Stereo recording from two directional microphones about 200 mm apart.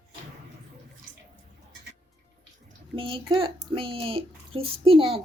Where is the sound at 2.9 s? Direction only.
25° right (ahead or behind).